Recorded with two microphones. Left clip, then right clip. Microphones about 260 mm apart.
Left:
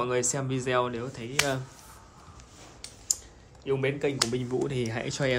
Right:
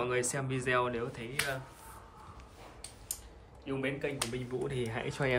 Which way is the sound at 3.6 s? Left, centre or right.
Left.